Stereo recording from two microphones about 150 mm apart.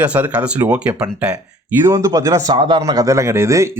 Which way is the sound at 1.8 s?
20° right (ahead or behind).